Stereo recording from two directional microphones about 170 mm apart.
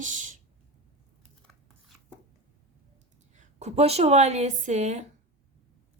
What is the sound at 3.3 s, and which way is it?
Speech, 40° right (ahead or behind).